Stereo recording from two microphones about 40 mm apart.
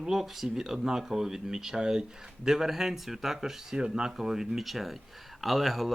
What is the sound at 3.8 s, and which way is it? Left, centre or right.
Speech, centre.